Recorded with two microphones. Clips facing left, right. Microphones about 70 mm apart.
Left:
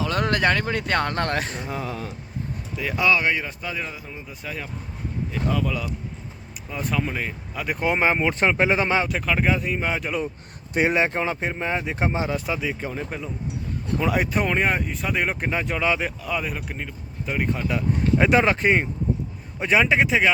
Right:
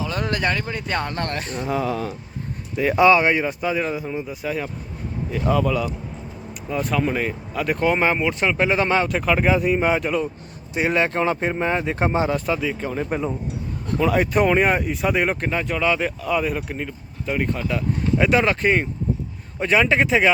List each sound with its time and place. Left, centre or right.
0.0 s speech: left
2.7 s speech: right
4.3 s speech: centre
7.9 s speech: centre
8.2 s speech: left; by 9.0 s centre
9.0 s speech: centre
10.9 s speech: centre
11.2 s speech: centre
13.1 s speech: right
14.0 s speech: centre
14.3 s speech: centre
15.4 s speech: centre
17.7 s speech: left; by 20.3 s centre